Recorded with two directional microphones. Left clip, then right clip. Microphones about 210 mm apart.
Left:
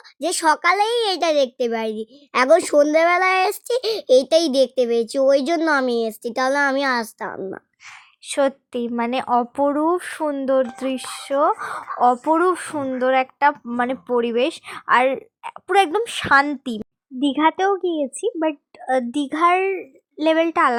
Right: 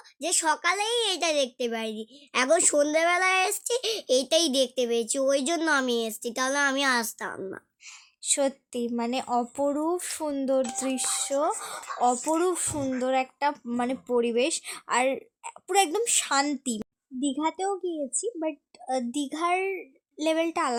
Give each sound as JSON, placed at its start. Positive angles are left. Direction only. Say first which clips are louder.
{"t": 0.2, "sound": "a child's voice", "louder": "left 8 dB", "side_deg": 30}